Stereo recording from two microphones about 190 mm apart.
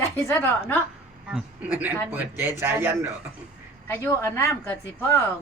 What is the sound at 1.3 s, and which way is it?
Speech, 5° right (ahead or behind).